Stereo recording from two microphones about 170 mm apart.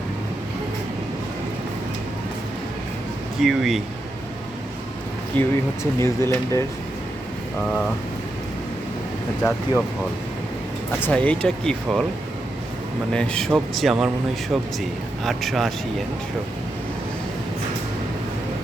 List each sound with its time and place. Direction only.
3.4 s speech: centre (ahead or behind)
5.4 s speech: 15° left (ahead or behind)
9.4 s speech: 5° left (ahead or behind)
11.0 s speech: 10° left (ahead or behind)
13.1 s speech: 5° left (ahead or behind)